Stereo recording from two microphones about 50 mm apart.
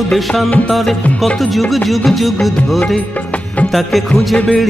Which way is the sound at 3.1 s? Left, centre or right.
Left.